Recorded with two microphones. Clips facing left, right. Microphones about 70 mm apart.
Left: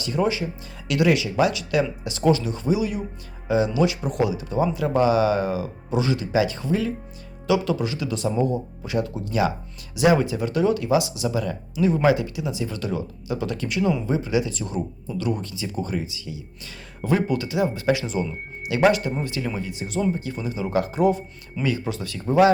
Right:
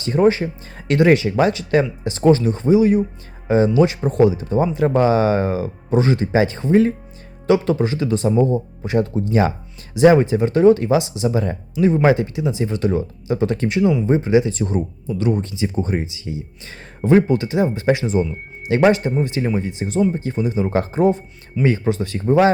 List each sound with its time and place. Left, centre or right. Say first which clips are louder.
0.0 s speech: right 7 dB; right